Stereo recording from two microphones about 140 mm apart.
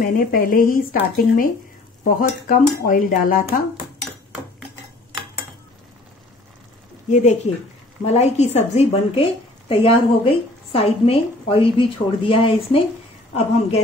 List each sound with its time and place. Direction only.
0.0 s speech: 90° left
2.0 s speech: 75° left (ahead or behind)
7.1 s a woman's voice: 55° left (ahead or behind); by 12.8 s 40° left (ahead or behind)